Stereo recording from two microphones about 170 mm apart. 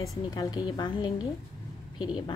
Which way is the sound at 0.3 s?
20° left (ahead or behind).